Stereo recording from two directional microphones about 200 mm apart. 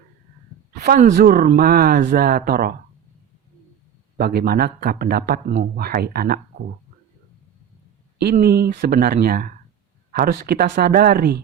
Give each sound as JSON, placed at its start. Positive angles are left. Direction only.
{"t": 0.7, "sound": "speech", "side_deg": -50}
{"t": 4.2, "sound": "speech", "side_deg": -50}
{"t": 8.2, "sound": "speech", "side_deg": -50}